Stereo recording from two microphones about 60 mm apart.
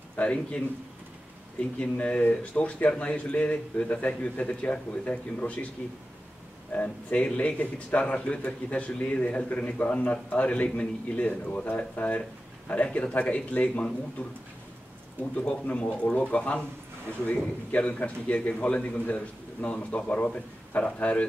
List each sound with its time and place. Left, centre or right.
0.1 s a man's voice: left
1.8 s a man's voice: centre
6.7 s a man's voice: left
15.3 s a man's voice: left